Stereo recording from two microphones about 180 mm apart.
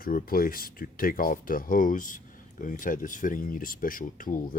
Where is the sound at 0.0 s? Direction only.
55° left (ahead or behind).